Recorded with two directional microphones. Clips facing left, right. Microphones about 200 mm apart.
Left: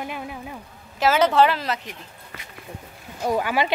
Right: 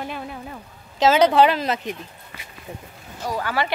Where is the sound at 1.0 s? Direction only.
15° right (ahead or behind).